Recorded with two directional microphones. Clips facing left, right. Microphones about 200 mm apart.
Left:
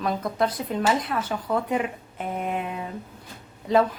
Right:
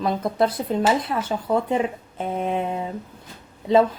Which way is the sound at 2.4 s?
30° right (ahead or behind).